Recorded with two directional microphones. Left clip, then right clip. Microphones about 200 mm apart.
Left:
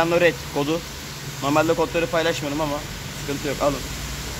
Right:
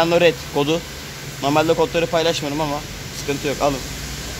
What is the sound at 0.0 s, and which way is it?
Speech, 35° right (ahead or behind).